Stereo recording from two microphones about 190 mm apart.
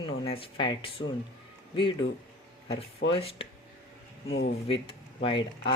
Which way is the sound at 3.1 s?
30° left (ahead or behind).